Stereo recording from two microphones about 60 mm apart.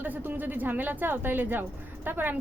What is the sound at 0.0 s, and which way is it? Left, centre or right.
A woman's voice, right.